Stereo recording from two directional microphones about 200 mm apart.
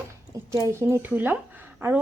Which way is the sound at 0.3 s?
15° right (ahead or behind).